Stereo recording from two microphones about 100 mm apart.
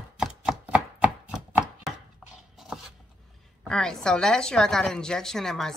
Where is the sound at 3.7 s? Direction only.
5° left (ahead or behind).